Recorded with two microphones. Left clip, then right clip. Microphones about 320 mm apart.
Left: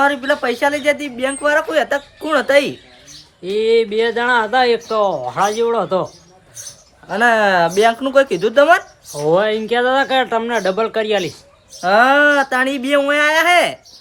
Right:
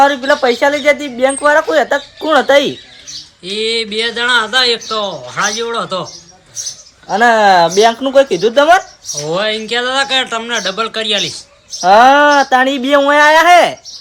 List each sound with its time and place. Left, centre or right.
0.0 s speech: centre
3.5 s speech: centre
7.1 s speech: centre
9.1 s speech: centre
11.8 s speech: centre